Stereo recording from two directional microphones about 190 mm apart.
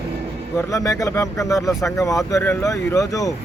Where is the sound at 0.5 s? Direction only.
15° left (ahead or behind).